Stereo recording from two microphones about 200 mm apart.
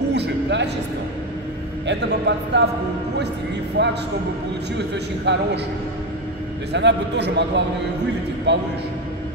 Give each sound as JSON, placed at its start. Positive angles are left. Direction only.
{"t": 0.1, "sound": "music", "side_deg": -60}
{"t": 1.9, "sound": "a man's voice", "side_deg": -60}
{"t": 3.8, "sound": "a man's voice", "side_deg": -60}
{"t": 6.7, "sound": "a man's voice", "side_deg": -60}